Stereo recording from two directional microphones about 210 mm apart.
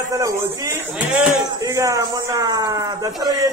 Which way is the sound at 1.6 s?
15° right (ahead or behind).